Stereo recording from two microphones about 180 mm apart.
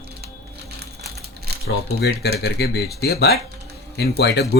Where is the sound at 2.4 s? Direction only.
65° left (ahead or behind).